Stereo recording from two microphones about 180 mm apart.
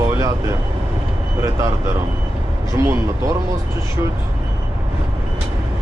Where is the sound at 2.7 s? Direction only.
15° right (ahead or behind).